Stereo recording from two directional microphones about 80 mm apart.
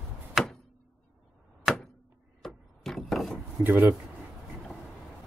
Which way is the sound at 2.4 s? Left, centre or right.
Centre.